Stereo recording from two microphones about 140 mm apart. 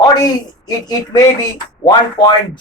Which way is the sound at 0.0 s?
25° left (ahead or behind).